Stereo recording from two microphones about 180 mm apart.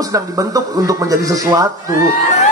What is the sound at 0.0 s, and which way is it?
A man's voice, 20° right (ahead or behind).